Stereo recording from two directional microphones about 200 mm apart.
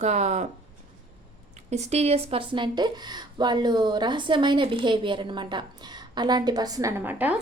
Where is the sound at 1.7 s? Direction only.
35° right (ahead or behind).